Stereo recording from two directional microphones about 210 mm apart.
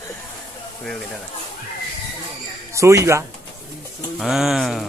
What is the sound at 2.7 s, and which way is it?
Speech, 15° right (ahead or behind).